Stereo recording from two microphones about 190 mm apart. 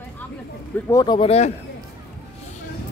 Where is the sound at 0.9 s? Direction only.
25° left (ahead or behind).